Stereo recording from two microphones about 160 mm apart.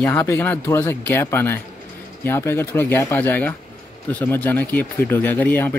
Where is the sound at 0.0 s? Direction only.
15° left (ahead or behind).